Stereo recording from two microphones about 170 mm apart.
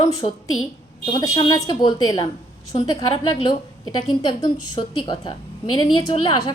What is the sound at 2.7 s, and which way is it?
Speech, 35° left (ahead or behind).